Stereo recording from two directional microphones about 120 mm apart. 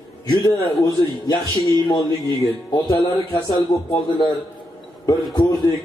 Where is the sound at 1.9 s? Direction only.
35° left (ahead or behind).